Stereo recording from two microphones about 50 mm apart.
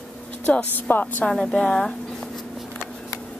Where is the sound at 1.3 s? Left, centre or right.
Centre.